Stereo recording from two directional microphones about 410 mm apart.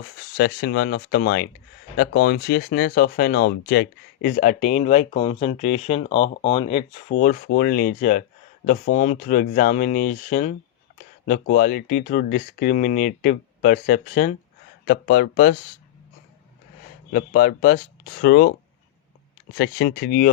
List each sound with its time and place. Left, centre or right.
0.3 s speech: left
17.1 s speech: left
19.5 s speech: left